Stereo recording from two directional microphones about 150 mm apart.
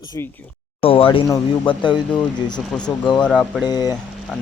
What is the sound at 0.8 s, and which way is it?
Speech, 35° left (ahead or behind).